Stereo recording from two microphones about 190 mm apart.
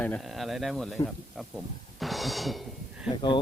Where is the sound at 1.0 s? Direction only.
Centre (ahead or behind).